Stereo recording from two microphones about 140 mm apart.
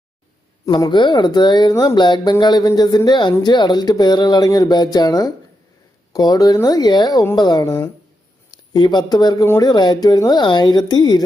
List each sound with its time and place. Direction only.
0.7 s speech: 30° left (ahead or behind)